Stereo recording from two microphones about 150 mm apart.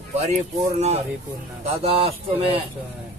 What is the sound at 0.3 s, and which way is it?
Speech, 45° right (ahead or behind).